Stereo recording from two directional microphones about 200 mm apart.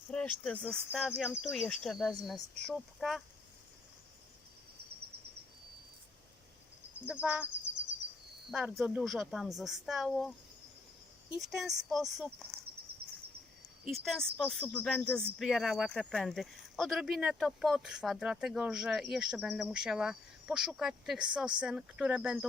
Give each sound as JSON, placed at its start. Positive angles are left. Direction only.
{"t": 0.1, "sound": "speech", "side_deg": 5}
{"t": 7.1, "sound": "speech", "side_deg": -5}
{"t": 13.0, "sound": "a sound", "side_deg": -50}
{"t": 13.8, "sound": "speech", "side_deg": 0}